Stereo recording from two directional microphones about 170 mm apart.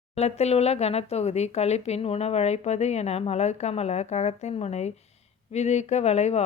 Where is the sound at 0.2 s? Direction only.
40° left (ahead or behind).